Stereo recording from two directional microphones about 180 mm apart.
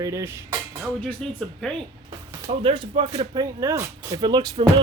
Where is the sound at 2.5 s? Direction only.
30° right (ahead or behind).